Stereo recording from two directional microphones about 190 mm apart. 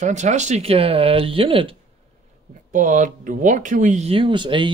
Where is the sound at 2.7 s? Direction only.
45° right (ahead or behind); by 4.7 s 25° right (ahead or behind).